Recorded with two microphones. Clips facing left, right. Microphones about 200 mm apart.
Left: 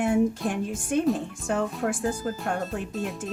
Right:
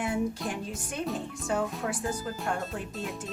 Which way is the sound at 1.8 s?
50° left (ahead or behind).